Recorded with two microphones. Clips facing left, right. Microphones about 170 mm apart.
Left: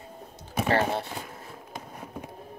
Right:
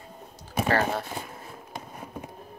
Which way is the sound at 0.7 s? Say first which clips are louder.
Left 1 dB; 25° left (ahead or behind).